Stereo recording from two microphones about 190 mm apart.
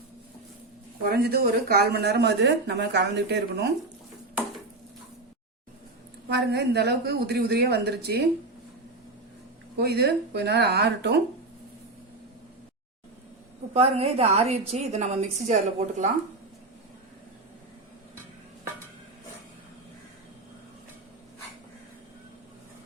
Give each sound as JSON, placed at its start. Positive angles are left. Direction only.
{"t": 1.0, "sound": "speech", "side_deg": -55}
{"t": 6.2, "sound": "speech", "side_deg": -65}
{"t": 9.7, "sound": "speech", "side_deg": -60}
{"t": 13.7, "sound": "a woman's voice", "side_deg": -30}